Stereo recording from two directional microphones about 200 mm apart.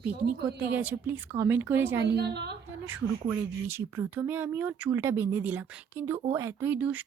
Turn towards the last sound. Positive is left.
turn(degrees=-10)  # may be behind; listen again after turning